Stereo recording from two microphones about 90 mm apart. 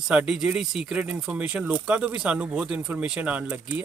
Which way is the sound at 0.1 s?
10° right (ahead or behind).